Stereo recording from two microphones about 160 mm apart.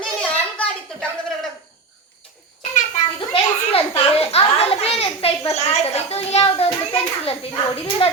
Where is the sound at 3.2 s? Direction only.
35° left (ahead or behind).